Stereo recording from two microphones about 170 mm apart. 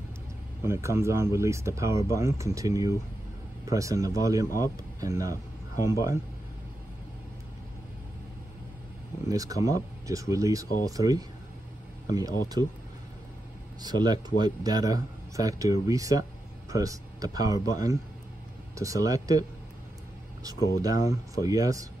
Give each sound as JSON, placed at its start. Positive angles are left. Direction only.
{"t": 0.7, "sound": "speech", "side_deg": -15}
{"t": 9.3, "sound": "speech", "side_deg": -20}
{"t": 13.7, "sound": "speech", "side_deg": -25}
{"t": 20.4, "sound": "speech", "side_deg": -20}